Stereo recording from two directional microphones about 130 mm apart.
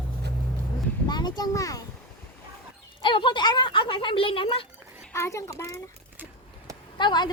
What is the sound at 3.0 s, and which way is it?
Speech, 40° left (ahead or behind).